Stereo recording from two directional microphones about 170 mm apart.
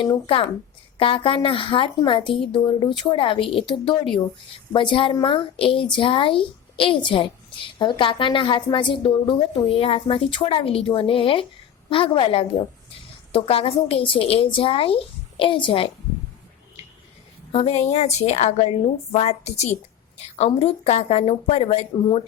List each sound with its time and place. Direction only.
0.0 s speech: 30° left (ahead or behind)
17.5 s speech: 35° left (ahead or behind)